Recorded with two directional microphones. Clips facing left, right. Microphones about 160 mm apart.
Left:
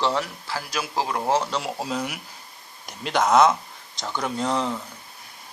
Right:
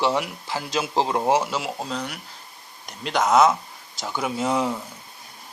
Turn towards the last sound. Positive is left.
turn(degrees=-10)  # may be behind; listen again after turning